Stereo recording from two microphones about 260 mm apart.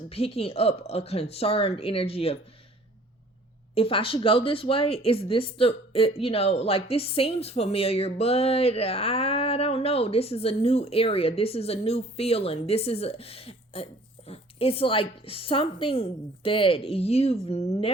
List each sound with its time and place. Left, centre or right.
0.1 s speech: left
3.8 s speech: left